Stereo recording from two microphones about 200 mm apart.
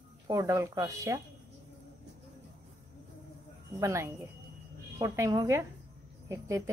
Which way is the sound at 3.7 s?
15° right (ahead or behind).